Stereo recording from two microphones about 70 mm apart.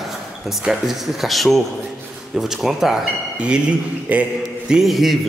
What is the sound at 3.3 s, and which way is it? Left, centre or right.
Speech, centre.